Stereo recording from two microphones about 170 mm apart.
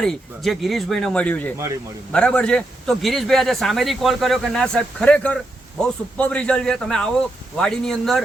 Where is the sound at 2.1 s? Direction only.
5° left (ahead or behind).